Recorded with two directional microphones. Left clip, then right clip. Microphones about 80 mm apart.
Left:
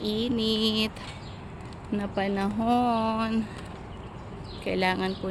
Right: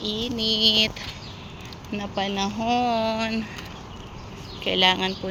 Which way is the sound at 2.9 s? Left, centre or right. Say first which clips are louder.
Right 3 dB; left.